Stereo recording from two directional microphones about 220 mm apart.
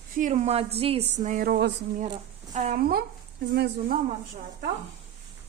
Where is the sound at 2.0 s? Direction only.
30° right (ahead or behind); by 4.0 s 45° right (ahead or behind).